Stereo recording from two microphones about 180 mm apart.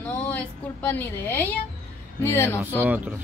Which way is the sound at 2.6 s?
10° right (ahead or behind).